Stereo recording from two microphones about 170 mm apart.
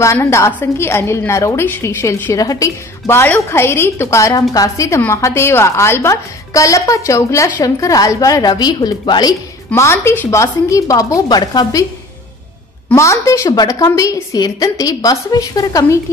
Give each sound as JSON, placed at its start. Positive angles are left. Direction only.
{"t": 0.0, "sound": "a woman's voice", "side_deg": 15}
{"t": 12.9, "sound": "a woman's voice", "side_deg": 15}